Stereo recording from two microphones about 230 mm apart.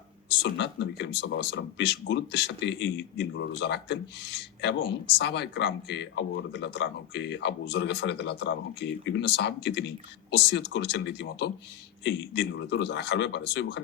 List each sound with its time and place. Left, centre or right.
0.4 s speech: left